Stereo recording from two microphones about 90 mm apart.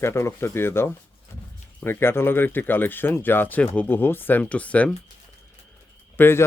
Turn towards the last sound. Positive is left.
turn(degrees=25)  # may be behind; listen again after turning